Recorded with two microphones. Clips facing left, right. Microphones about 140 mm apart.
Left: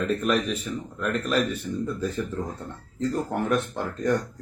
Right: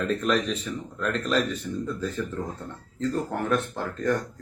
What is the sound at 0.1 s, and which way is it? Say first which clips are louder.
Speech: even; 5° left (ahead or behind).